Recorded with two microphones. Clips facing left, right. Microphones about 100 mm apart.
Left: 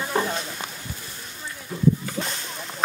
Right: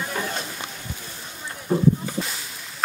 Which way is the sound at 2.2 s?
Centre (ahead or behind).